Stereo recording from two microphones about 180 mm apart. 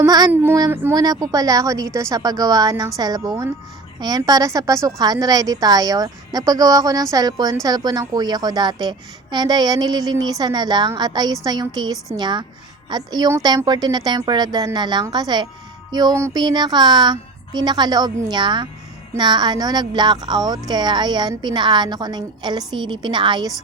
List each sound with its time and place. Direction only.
0.0 s a woman's voice: 20° right (ahead or behind)